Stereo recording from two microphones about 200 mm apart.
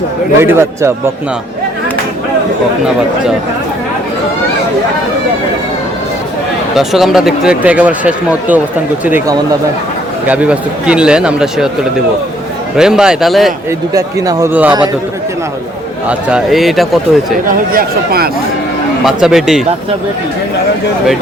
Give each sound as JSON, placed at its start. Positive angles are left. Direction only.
{"t": 0.4, "sound": "speech", "side_deg": -10}
{"t": 6.7, "sound": "speech", "side_deg": 0}
{"t": 13.7, "sound": "speech", "side_deg": -15}
{"t": 16.0, "sound": "speech", "side_deg": -5}
{"t": 17.7, "sound": "speech", "side_deg": -50}
{"t": 19.0, "sound": "speech", "side_deg": 0}